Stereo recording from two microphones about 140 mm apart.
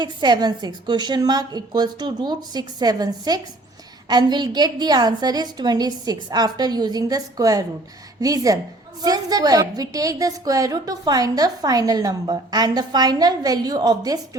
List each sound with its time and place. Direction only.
0.0 s a woman's voice: 30° right (ahead or behind)